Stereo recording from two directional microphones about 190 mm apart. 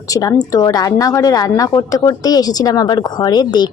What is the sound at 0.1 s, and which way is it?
A woman's voice, 20° left (ahead or behind).